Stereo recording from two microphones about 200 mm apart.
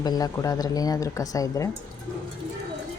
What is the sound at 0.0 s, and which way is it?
Speech, 20° left (ahead or behind).